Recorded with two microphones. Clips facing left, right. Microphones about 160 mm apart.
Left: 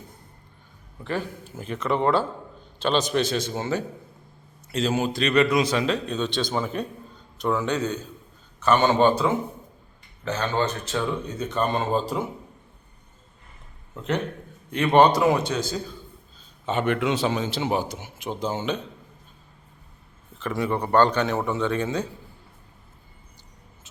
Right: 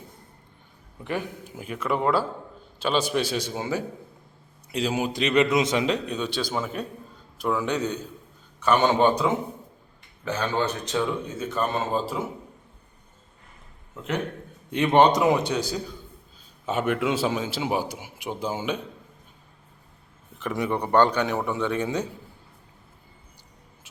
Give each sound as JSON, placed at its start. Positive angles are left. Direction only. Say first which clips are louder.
{"t": 1.0, "sound": "a man's voice", "louder": "left 1 dB", "side_deg": -15}
{"t": 14.7, "sound": "a man's voice", "louder": "left 1 dB", "side_deg": -20}
{"t": 20.4, "sound": "a man's voice", "louder": "left 1 dB", "side_deg": -15}